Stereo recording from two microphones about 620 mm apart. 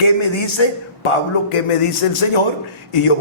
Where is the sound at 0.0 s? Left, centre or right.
Left.